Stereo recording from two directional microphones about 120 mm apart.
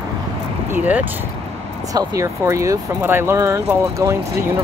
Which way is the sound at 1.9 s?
25° right (ahead or behind).